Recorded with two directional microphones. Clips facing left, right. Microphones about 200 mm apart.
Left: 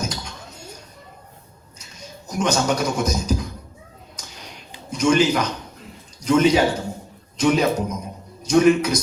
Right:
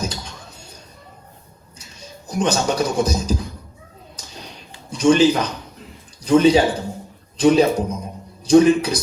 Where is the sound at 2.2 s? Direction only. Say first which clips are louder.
Right 1 dB; 30° right (ahead or behind).